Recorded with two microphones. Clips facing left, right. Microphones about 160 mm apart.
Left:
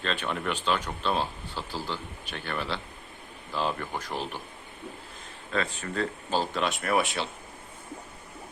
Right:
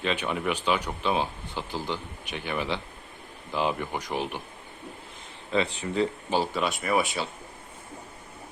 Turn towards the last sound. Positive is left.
turn(degrees=0)  # may be behind; listen again after turning